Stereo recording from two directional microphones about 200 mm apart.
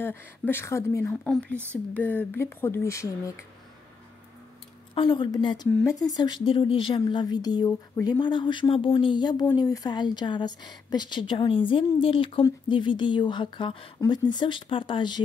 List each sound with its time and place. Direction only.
0.0 s speech: 10° left (ahead or behind)
4.9 s a woman's voice: 25° left (ahead or behind)